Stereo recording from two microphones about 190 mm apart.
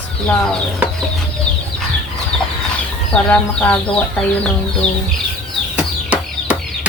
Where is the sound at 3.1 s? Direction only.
5° left (ahead or behind).